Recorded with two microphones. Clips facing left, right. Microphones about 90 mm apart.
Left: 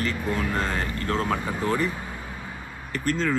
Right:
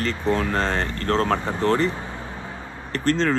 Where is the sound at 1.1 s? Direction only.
30° right (ahead or behind).